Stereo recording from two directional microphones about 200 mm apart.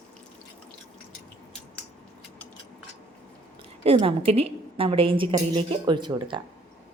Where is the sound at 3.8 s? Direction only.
30° right (ahead or behind).